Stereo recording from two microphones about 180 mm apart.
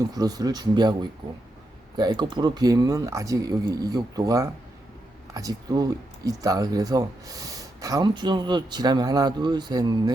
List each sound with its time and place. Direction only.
0.0 s speech: 20° right (ahead or behind)
2.0 s speech: 25° right (ahead or behind)